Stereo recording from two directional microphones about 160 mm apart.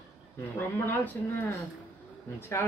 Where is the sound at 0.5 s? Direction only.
10° left (ahead or behind).